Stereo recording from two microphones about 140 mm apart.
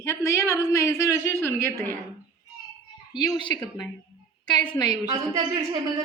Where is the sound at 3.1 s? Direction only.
30° left (ahead or behind).